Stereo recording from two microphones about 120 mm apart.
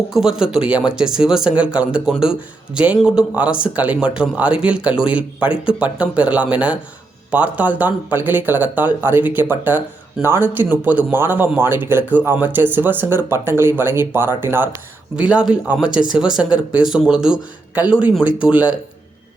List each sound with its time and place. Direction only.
0.1 s speech: 5° right (ahead or behind)